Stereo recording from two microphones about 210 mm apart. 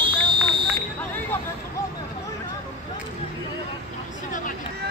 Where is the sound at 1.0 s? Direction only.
10° left (ahead or behind).